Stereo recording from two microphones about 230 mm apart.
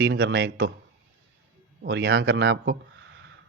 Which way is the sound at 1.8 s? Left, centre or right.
Right.